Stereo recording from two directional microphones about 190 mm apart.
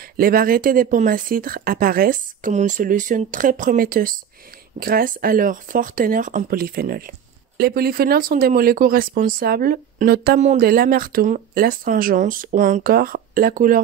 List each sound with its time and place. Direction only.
0.2 s speech: 50° right (ahead or behind)